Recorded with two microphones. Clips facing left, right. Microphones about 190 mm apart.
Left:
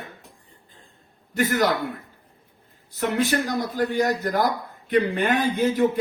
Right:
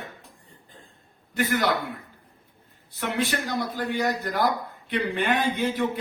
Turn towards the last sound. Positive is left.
turn(degrees=40)  # may be behind; listen again after turning